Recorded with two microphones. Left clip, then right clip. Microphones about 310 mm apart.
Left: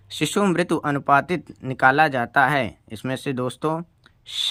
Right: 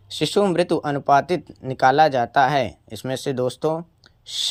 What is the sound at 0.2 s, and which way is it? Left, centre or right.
Speech, left.